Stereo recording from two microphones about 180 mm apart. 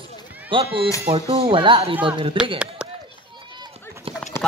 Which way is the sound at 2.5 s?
5° right (ahead or behind).